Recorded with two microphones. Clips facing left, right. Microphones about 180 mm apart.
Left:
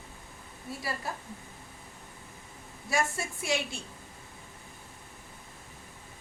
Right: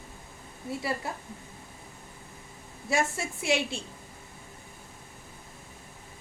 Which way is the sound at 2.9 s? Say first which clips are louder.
Right 2 dB; 25° right (ahead or behind).